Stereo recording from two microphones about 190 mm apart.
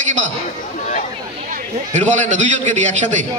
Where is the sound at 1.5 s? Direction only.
40° right (ahead or behind).